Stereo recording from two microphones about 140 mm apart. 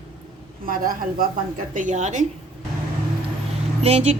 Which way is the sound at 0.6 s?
90° right.